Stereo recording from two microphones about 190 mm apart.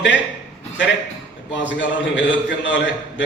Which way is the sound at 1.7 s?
75° left (ahead or behind).